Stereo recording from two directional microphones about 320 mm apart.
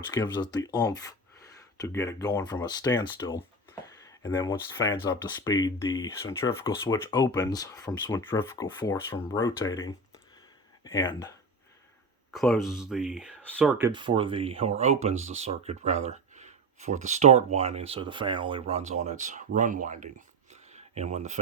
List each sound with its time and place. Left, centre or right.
0.1 s speech: centre
11.0 s speech: centre
12.3 s speech: centre
13.9 s speech: centre